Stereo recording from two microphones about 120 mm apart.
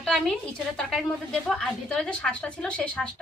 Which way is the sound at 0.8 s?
Centre (ahead or behind).